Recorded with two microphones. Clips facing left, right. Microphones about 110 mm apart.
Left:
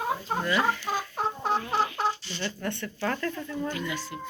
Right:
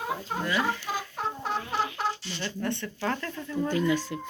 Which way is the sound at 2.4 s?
25° right (ahead or behind).